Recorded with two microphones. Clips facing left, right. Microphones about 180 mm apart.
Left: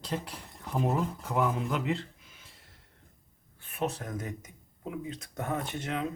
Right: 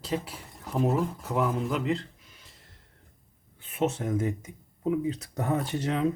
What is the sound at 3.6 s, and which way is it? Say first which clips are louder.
Speech: right 5 dB; 20° right (ahead or behind).